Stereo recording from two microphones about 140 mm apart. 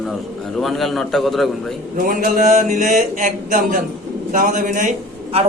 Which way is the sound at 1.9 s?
80° right.